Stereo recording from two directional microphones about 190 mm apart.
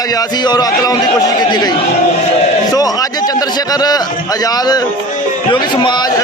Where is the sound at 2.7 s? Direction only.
20° left (ahead or behind).